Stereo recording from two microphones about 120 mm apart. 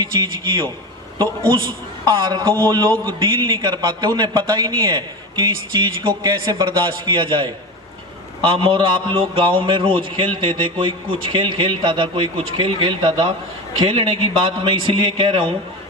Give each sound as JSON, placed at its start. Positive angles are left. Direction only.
{"t": 0.0, "sound": "a man's voice", "side_deg": -40}
{"t": 2.0, "sound": "a man's voice", "side_deg": -35}